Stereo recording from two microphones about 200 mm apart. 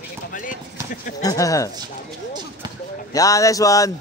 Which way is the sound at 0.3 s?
40° left (ahead or behind).